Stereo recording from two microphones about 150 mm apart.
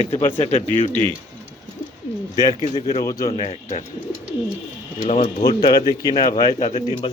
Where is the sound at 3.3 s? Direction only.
40° left (ahead or behind).